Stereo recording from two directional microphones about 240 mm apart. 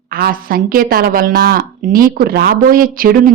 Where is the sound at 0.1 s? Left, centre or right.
Right.